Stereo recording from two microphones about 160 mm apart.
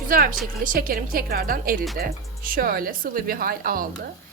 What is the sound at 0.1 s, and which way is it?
A woman's voice, 60° right (ahead or behind).